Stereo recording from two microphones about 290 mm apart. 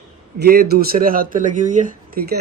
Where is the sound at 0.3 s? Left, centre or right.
Right.